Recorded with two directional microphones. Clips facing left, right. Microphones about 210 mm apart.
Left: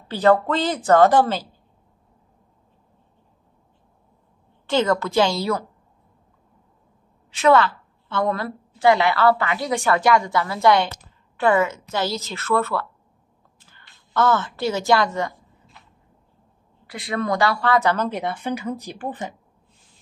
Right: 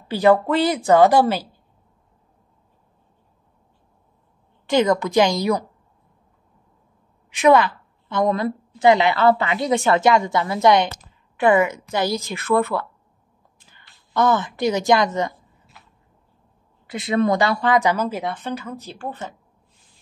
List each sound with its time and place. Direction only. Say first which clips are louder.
0.1 s a woman's voice: right 2 dB; 10° right (ahead or behind)
4.6 s a woman's voice: right 2 dB; 15° right (ahead or behind)
7.2 s a woman's voice: right 2 dB; 15° right (ahead or behind)
16.9 s a woman's voice: right 5 dB; 20° right (ahead or behind); by 18.3 s 5° right (ahead or behind)
18.3 s speech: left 2 dB; 10° left (ahead or behind)